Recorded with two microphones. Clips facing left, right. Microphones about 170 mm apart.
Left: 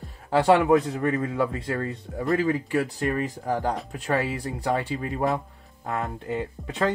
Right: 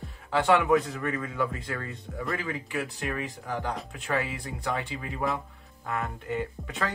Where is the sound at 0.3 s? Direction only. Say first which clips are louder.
Left 4 dB; 40° left (ahead or behind).